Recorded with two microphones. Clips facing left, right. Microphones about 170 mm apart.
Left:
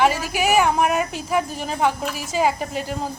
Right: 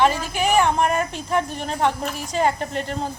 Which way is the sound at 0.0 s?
10° left (ahead or behind).